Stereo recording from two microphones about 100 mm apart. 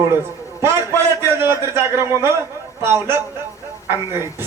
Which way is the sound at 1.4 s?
25° right (ahead or behind).